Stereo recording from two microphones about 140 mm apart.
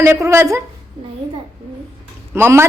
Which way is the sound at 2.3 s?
15° right (ahead or behind).